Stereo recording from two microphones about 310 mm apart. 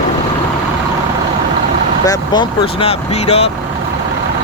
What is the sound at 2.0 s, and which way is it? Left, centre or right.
Speech, centre.